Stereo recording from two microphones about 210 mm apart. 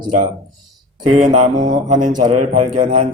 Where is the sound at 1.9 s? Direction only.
35° right (ahead or behind).